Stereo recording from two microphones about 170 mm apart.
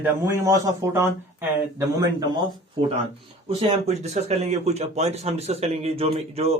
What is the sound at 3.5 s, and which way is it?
A man's voice, 35° right (ahead or behind).